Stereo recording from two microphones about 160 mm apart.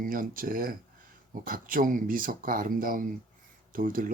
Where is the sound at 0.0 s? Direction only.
60° right (ahead or behind).